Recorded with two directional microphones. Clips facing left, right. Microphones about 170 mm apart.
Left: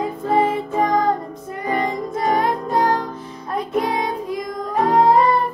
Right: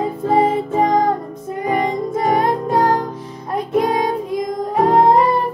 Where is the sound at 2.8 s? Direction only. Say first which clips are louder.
Right 2 dB; 20° right (ahead or behind).